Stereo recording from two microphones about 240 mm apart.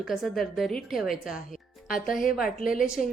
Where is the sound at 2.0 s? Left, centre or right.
Left.